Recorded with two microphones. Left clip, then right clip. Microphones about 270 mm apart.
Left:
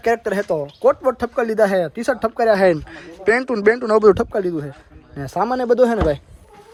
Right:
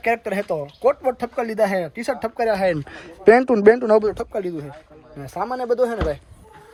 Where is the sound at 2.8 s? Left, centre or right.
Centre.